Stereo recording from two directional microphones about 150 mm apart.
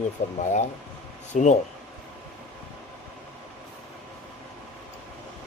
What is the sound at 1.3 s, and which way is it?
Speech, 55° left (ahead or behind).